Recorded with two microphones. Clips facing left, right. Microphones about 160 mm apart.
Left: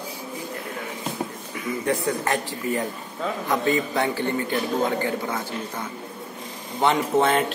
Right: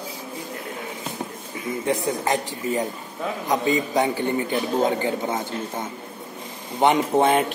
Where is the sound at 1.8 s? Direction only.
20° right (ahead or behind).